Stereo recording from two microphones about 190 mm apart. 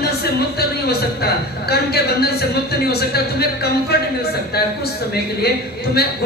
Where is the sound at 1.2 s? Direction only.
55° left (ahead or behind).